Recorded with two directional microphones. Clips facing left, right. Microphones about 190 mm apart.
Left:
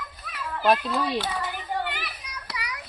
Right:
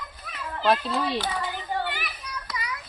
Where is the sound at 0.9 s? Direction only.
Centre (ahead or behind).